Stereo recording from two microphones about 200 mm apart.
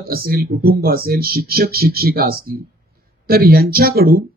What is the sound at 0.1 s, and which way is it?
Speech, 50° right (ahead or behind).